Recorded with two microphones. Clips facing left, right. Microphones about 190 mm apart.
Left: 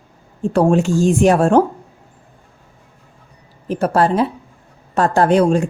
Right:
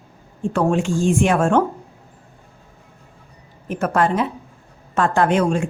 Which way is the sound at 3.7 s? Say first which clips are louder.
Left 3 dB; 35° left (ahead or behind).